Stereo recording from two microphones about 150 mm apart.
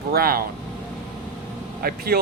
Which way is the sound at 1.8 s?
90° right.